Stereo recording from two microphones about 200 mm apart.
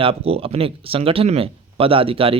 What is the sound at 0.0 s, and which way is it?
Speech, 30° right (ahead or behind).